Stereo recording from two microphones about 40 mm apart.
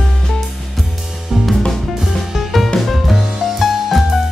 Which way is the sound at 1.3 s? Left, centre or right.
Centre.